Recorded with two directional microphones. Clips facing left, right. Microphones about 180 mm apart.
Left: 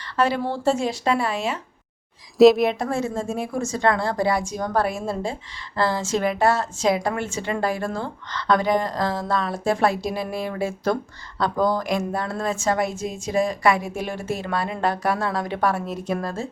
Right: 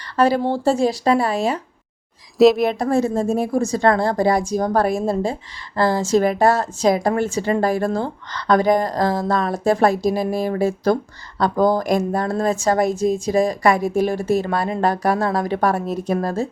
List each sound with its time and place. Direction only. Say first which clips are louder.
0.2 s speech: right 5 dB; 40° right (ahead or behind)
2.4 s speech: even; centre (ahead or behind)
2.7 s speech: right 6 dB; 40° right (ahead or behind)